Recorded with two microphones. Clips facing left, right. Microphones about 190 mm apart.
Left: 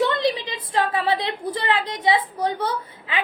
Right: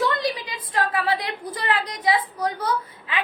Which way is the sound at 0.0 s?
25° left (ahead or behind).